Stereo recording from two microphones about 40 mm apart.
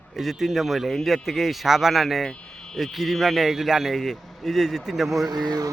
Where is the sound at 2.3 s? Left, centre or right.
Centre.